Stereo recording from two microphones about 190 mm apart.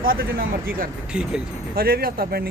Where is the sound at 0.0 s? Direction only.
50° right (ahead or behind).